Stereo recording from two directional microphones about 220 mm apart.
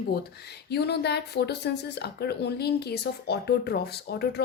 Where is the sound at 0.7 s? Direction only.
50° left (ahead or behind).